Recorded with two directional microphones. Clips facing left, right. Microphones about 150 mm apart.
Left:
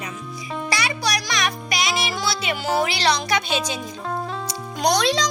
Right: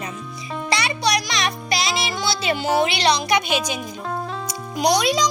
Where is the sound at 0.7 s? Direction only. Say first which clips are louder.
Right 4 dB; 25° right (ahead or behind).